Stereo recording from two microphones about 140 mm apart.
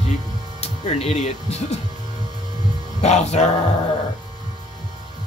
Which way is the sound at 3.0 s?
50° left (ahead or behind).